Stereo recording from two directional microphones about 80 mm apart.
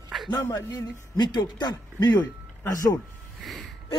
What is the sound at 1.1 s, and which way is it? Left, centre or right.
Speech, left.